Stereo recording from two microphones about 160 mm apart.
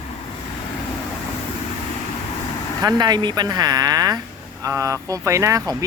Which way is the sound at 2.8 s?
25° right (ahead or behind).